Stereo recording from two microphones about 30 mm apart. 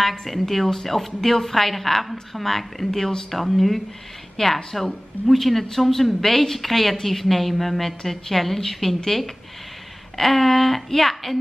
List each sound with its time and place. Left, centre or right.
0.0 s a woman's voice: centre
4.4 s a woman's voice: centre
4.7 s a woman's voice: centre